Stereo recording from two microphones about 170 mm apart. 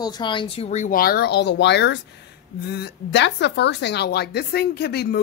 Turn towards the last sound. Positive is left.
turn(degrees=70)  # may be behind; listen again after turning